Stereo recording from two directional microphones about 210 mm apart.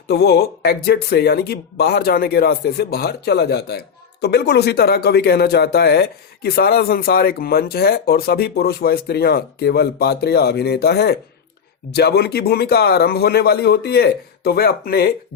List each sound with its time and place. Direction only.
0.1 s speech: 50° left (ahead or behind)